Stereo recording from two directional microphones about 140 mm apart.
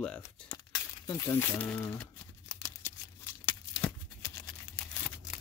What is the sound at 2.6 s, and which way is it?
Tearing, 15° left (ahead or behind).